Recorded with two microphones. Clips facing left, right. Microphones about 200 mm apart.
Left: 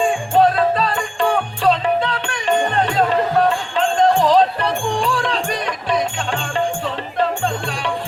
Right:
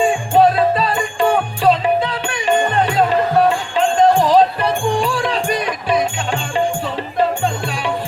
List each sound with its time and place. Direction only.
0.0 s music: 10° right (ahead or behind)